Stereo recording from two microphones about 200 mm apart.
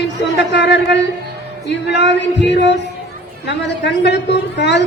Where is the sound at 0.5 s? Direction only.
60° left (ahead or behind).